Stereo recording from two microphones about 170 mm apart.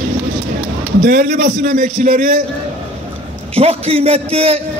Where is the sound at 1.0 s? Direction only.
50° right (ahead or behind).